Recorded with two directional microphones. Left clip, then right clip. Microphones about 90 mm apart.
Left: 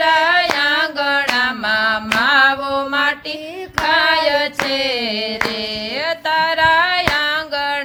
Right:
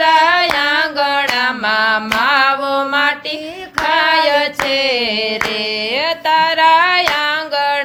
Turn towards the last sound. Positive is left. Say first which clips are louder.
# right 3 dB
turn(degrees=-30)  # may be behind; listen again after turning